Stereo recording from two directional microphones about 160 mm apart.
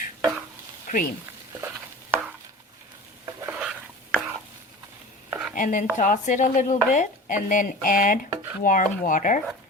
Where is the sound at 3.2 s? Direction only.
20° right (ahead or behind).